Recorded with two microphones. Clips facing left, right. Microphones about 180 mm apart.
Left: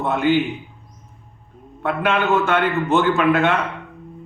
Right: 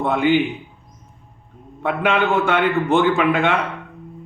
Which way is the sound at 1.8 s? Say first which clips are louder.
Right 1 dB; 15° right (ahead or behind).